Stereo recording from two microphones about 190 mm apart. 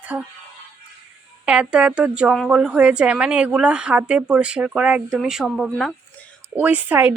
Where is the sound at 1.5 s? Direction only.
5° right (ahead or behind).